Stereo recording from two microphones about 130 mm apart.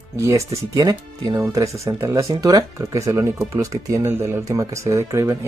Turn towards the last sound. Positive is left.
turn(degrees=-20)  # may be behind; listen again after turning